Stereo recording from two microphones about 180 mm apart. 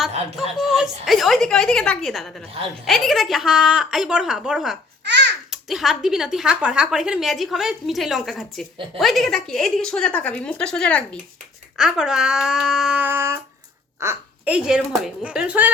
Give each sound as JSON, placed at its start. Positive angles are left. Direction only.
{"t": 0.7, "sound": "a woman's voice", "side_deg": 0}
{"t": 5.0, "sound": "babbling", "side_deg": -70}
{"t": 5.5, "sound": "a woman's voice", "side_deg": 0}